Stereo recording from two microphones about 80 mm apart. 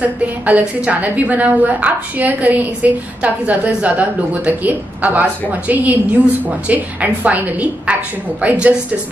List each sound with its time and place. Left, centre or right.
0.0 s a woman's voice: centre